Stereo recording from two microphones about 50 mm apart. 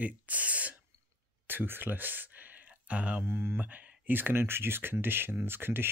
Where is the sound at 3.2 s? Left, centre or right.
Right.